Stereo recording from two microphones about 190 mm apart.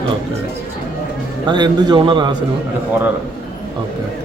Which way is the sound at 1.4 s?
25° right (ahead or behind).